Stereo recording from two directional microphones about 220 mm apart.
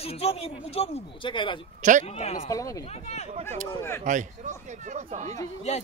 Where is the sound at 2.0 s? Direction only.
30° left (ahead or behind).